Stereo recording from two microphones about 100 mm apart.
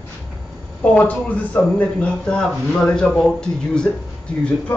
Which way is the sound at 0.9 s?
15° left (ahead or behind).